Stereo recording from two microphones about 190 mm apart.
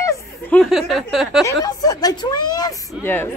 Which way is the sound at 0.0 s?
5° left (ahead or behind).